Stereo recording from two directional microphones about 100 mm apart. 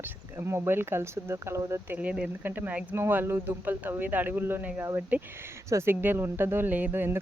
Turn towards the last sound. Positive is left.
turn(degrees=-20)  # may be behind; listen again after turning